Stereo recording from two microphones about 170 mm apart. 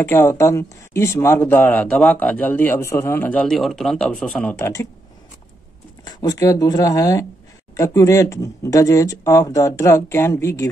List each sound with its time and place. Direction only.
0.0 s speech: 15° left (ahead or behind)
6.0 s speech: 20° left (ahead or behind)